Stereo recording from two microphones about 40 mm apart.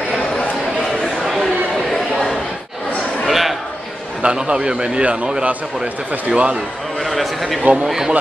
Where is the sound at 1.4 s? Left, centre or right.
Centre.